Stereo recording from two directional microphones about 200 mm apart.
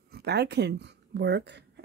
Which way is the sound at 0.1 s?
55° right (ahead or behind).